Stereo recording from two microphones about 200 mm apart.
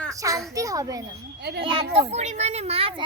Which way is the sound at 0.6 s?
15° right (ahead or behind).